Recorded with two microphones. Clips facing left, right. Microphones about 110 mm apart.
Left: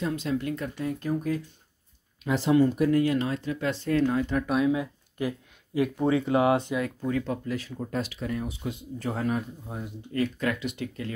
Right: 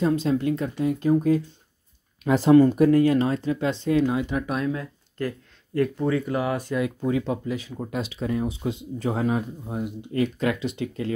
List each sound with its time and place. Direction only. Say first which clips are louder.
0.0 s speech: right 6 dB; 35° right (ahead or behind)
2.2 s speech: right 6 dB; 50° right (ahead or behind); by 4.5 s 15° right (ahead or behind)
4.5 s speech: left 2 dB; 5° left (ahead or behind); by 6.7 s 25° left (ahead or behind)
7.0 s speech: right 4 dB; 15° right (ahead or behind)